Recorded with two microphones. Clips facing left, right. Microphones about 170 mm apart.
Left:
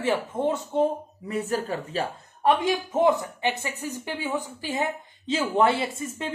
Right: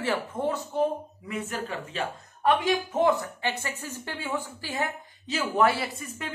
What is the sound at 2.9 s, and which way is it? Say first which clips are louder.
A woman's voice: left 4 dB; 15° left (ahead or behind).